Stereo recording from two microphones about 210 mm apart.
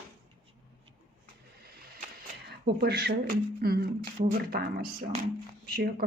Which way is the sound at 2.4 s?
50° right (ahead or behind).